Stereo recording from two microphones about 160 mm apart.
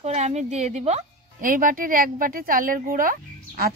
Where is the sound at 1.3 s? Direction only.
60° right (ahead or behind).